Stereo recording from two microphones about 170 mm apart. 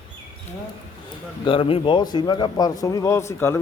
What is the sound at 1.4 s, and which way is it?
Speech, 30° left (ahead or behind).